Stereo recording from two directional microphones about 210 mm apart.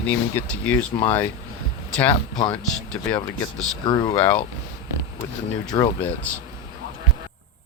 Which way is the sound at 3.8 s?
20° left (ahead or behind).